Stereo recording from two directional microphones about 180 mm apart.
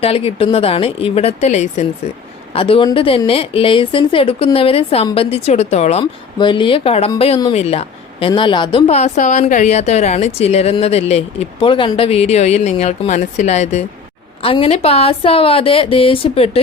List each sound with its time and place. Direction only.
0.0 s speech: 35° left (ahead or behind)